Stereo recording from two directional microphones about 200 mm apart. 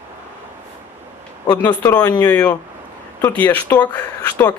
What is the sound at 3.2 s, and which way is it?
Speech, 10° left (ahead or behind).